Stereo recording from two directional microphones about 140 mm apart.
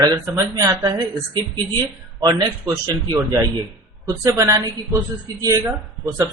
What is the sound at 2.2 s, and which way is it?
Speech, 25° right (ahead or behind).